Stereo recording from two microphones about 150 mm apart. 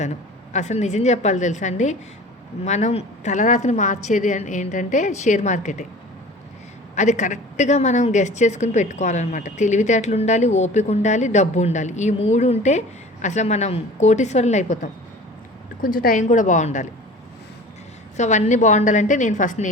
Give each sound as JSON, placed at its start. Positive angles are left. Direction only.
{"t": 0.0, "sound": "a woman's voice", "side_deg": 50}
{"t": 6.9, "sound": "a woman's voice", "side_deg": 50}
{"t": 16.0, "sound": "a woman's voice", "side_deg": 65}
{"t": 18.2, "sound": "a woman's voice", "side_deg": 55}